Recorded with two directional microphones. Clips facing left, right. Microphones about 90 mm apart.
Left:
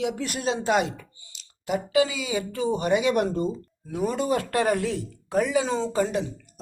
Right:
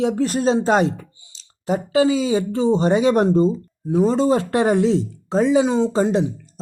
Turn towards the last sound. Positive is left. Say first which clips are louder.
# right 7 dB
turn(degrees=-25)  # may be behind; listen again after turning